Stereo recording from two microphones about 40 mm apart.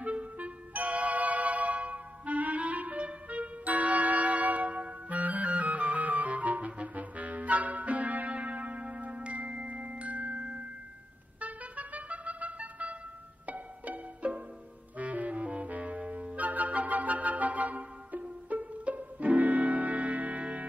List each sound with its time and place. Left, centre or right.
0.0 s music: right
11.3 s a sound: right
13.5 s music: right